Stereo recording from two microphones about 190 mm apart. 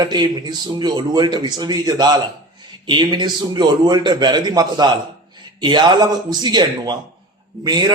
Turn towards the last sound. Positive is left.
turn(degrees=-25)  # may be behind; listen again after turning